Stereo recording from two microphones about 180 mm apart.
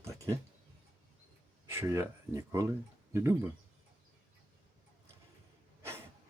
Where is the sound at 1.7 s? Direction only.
15° right (ahead or behind).